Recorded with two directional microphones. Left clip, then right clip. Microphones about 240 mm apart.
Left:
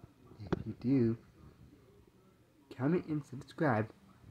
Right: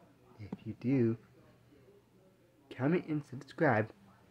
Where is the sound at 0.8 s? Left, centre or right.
Centre.